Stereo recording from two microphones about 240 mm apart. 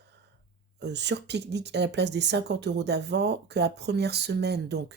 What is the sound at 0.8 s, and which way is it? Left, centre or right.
Speech, right.